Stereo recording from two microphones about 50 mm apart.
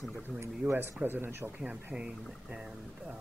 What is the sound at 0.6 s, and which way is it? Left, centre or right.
Speech, right.